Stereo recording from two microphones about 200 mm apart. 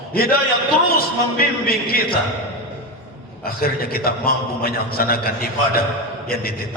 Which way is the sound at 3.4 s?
50° left (ahead or behind).